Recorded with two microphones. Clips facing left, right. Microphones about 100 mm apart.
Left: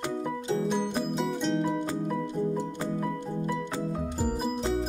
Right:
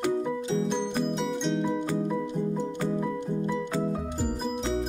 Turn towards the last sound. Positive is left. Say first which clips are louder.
# left 1 dB
turn(degrees=5)  # may be behind; listen again after turning